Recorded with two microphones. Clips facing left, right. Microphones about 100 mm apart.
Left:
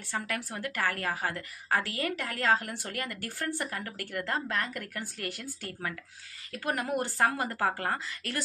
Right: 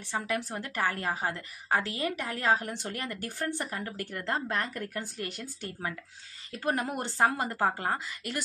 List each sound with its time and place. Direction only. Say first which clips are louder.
0.1 s a woman's voice: right 3 dB; 20° right (ahead or behind)